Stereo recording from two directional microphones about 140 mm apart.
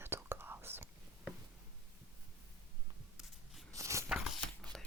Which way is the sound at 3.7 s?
20° right (ahead or behind).